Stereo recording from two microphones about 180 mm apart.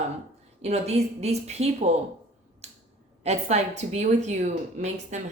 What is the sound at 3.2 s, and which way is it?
A woman's voice, 40° right (ahead or behind).